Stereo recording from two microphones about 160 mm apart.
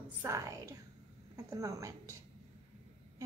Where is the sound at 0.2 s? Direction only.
20° right (ahead or behind).